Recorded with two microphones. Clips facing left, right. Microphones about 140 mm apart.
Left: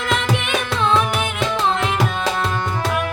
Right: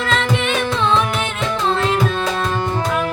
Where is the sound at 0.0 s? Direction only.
10° left (ahead or behind).